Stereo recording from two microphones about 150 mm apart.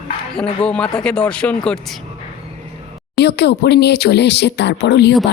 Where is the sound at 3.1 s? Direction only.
90° left.